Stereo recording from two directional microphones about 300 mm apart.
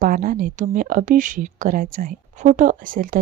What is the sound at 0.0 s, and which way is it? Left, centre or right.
Speech, right.